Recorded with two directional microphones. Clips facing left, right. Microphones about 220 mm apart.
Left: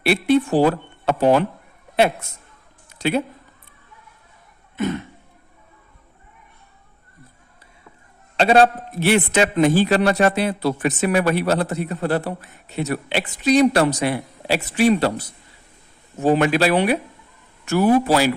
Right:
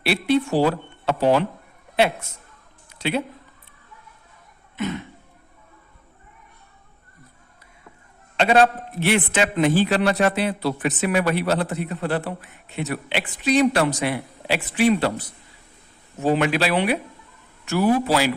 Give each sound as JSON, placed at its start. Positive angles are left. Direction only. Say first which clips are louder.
{"t": 0.0, "sound": "speech", "louder": "left 3 dB", "side_deg": 50}
{"t": 3.0, "sound": "speech", "louder": "left 3 dB", "side_deg": 45}
{"t": 8.4, "sound": "a man's voice", "louder": "left 2 dB", "side_deg": 35}
{"t": 16.2, "sound": "speech", "louder": "left 3 dB", "side_deg": 45}